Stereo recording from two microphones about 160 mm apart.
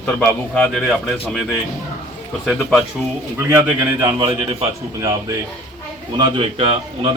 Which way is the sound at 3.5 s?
15° right (ahead or behind).